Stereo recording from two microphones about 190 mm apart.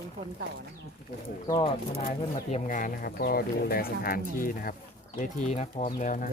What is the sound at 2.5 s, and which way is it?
Speech, 45° left (ahead or behind).